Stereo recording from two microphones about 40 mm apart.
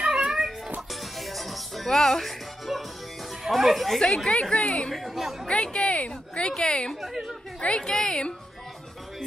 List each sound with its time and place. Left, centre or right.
0.0 s music: right
1.2 s music: centre
3.4 s speech: centre
4.3 s a woman's voice: left
4.9 s speech: centre
5.5 s a sound: left
6.6 s a woman's voice: left
7.9 s speech: centre